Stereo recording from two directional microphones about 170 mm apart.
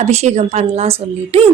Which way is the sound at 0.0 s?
40° right (ahead or behind).